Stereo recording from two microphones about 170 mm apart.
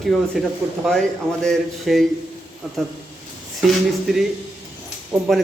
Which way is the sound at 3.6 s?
Centre (ahead or behind).